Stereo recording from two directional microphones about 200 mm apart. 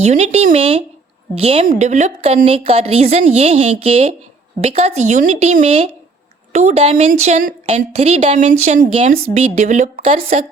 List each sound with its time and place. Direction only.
0.0 s a woman's voice: 35° right (ahead or behind)
10.2 s a woman's voice: 45° right (ahead or behind)